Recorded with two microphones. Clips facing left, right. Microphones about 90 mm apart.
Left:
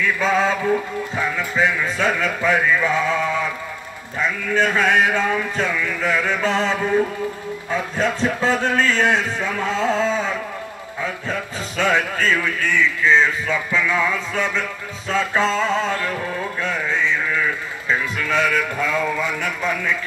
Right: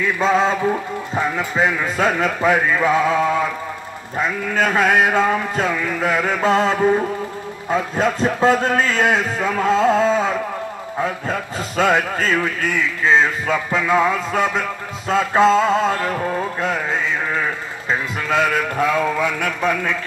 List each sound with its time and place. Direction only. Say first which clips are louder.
0.0 s speech: right 2 dB; 35° right (ahead or behind)
16.6 s music: left 2 dB; 40° right (ahead or behind)